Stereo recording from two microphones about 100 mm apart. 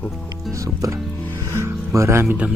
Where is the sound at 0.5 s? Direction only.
35° right (ahead or behind).